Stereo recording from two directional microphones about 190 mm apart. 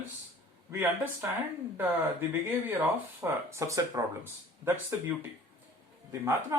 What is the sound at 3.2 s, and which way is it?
Speech, 15° right (ahead or behind).